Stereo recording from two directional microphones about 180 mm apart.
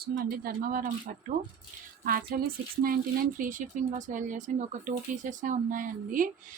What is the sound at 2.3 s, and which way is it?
Speech, 55° right (ahead or behind).